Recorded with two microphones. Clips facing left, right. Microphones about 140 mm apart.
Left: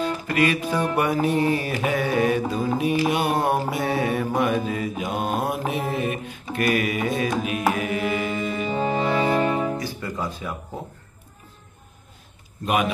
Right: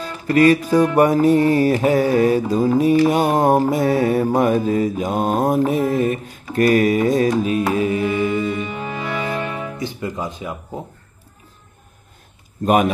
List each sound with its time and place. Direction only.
0.0 s music: 40° right (ahead or behind)
0.9 s mantra: 40° right (ahead or behind)
8.5 s music: 30° left (ahead or behind)
9.8 s speech: 20° right (ahead or behind)
12.6 s mantra: 40° right (ahead or behind)